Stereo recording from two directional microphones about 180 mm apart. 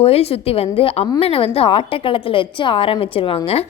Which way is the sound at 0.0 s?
35° left (ahead or behind).